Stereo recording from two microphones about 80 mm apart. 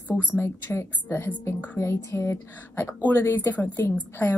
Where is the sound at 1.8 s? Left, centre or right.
Left.